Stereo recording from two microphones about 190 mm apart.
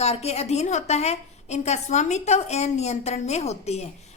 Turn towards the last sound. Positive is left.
turn(degrees=35)  # may be behind; listen again after turning